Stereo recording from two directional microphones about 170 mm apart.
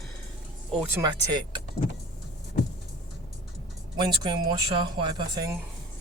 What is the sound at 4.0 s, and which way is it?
Speech, 25° right (ahead or behind).